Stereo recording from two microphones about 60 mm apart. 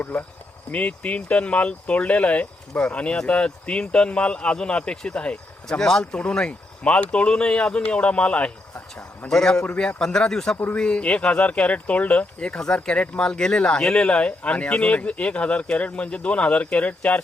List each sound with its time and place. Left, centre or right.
0.0 s speech: left
9.3 s speech: centre; by 17.2 s left